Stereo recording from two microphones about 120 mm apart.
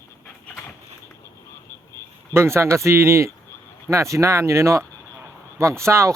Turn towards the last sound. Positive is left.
turn(degrees=-25)  # may be behind; listen again after turning